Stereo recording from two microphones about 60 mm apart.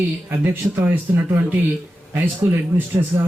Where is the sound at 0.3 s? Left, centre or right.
Right.